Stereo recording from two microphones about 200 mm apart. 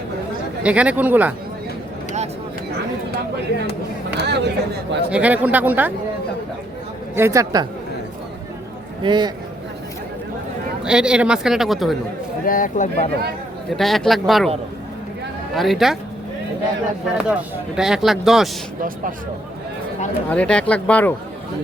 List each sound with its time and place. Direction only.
0.6 s speech: 5° right (ahead or behind)
4.2 s speech: 55° right (ahead or behind)
5.1 s speech: 5° right (ahead or behind)
7.2 s speech: 15° right (ahead or behind)
9.0 s a man's voice: 20° right (ahead or behind)
10.8 s speech: 5° right (ahead or behind)
12.5 s speech: 40° left (ahead or behind)
13.7 s speech: centre (ahead or behind)
15.5 s speech: centre (ahead or behind)
17.2 s speech: 5° right (ahead or behind)
20.3 s speech: 5° left (ahead or behind)